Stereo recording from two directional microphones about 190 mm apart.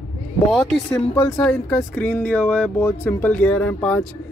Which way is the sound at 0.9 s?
15° left (ahead or behind).